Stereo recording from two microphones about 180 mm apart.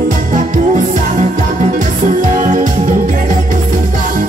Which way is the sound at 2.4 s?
45° right (ahead or behind).